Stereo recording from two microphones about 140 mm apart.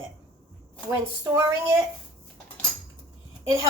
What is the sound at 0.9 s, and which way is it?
Speech, 20° right (ahead or behind).